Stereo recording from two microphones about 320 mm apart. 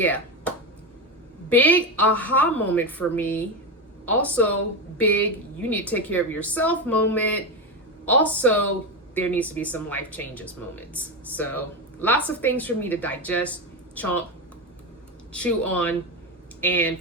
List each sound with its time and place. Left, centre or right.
0.0 s a sound: centre
1.5 s speech: centre
15.3 s speech: centre